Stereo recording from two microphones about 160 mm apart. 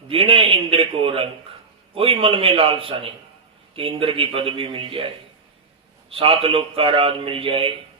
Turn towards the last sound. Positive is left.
turn(degrees=-35)  # may be behind; listen again after turning